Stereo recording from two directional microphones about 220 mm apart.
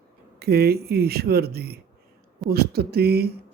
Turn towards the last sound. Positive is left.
turn(degrees=-45)  # may be behind; listen again after turning